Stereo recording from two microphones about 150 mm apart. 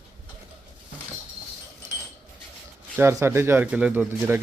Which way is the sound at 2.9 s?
15° right (ahead or behind).